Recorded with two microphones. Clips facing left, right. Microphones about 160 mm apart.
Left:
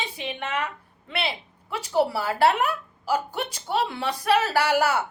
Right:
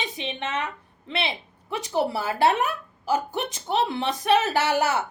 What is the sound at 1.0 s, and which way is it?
A woman's voice, 25° right (ahead or behind).